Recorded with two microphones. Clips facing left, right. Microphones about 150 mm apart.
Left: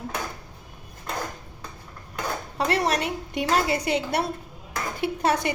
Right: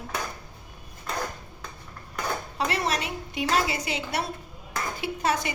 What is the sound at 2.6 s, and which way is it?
A woman's voice, 60° left (ahead or behind).